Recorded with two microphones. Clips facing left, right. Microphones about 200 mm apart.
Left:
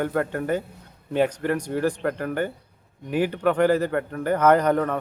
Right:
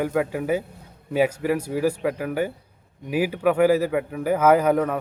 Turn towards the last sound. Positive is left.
turn(degrees=-5)  # may be behind; listen again after turning